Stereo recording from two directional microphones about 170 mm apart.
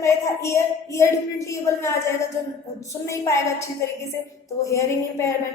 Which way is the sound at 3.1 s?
20° left (ahead or behind).